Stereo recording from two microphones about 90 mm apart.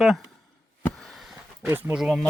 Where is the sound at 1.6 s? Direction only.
25° right (ahead or behind).